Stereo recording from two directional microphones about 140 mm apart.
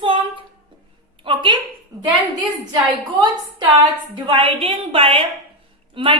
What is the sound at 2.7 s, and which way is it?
A woman's voice, 30° right (ahead or behind).